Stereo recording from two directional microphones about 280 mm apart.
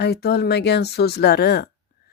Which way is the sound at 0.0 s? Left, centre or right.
Left.